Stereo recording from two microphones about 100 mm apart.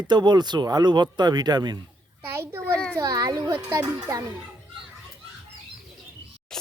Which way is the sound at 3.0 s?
35° right (ahead or behind).